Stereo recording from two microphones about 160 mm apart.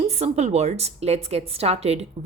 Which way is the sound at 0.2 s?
45° right (ahead or behind).